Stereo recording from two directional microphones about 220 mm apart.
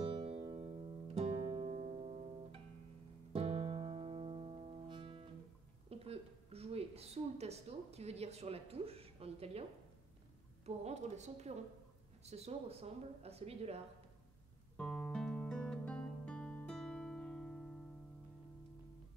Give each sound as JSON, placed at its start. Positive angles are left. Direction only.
{"t": 0.0, "sound": "keyboard", "side_deg": -25}
{"t": 0.5, "sound": "music", "side_deg": -25}
{"t": 3.3, "sound": "music", "side_deg": -30}
{"t": 5.9, "sound": "a woman's voice", "side_deg": -25}
{"t": 14.8, "sound": "music", "side_deg": 5}